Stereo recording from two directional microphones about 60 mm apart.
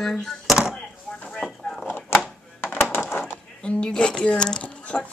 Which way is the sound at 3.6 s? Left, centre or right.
Centre.